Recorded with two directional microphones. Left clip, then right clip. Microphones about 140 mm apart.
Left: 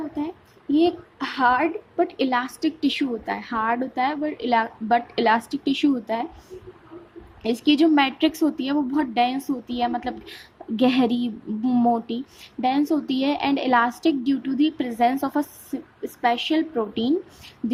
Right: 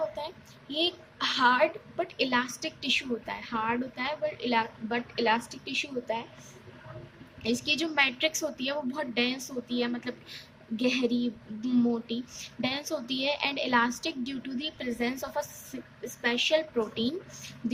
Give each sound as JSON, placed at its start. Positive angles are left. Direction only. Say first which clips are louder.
{"t": 0.7, "sound": "speech", "louder": "left 9 dB", "side_deg": 35}
{"t": 7.4, "sound": "speech", "louder": "left 10 dB", "side_deg": 50}